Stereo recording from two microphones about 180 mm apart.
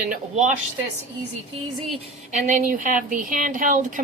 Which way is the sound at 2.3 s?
45° right (ahead or behind).